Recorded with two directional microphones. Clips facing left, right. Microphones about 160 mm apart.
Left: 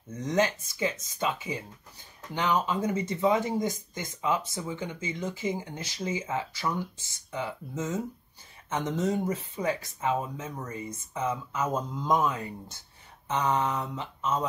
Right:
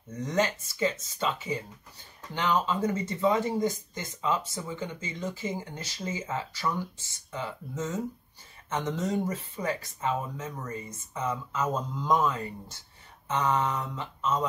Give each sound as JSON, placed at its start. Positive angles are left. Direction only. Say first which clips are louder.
{"t": 0.3, "sound": "speech", "louder": "left 2 dB", "side_deg": 15}